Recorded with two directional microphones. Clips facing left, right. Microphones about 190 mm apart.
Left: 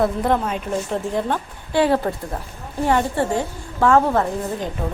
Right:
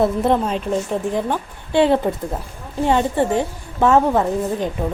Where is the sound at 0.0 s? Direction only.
20° right (ahead or behind).